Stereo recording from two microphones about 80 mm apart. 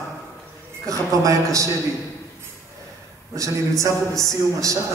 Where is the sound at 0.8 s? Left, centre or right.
Right.